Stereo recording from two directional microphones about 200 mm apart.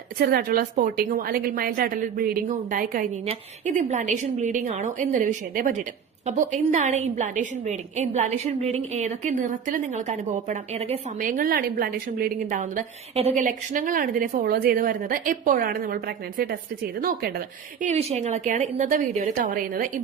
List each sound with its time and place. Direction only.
0.2 s a woman's voice: 50° right (ahead or behind)